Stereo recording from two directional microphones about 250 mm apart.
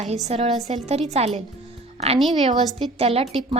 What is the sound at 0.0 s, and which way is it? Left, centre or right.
Speech, right.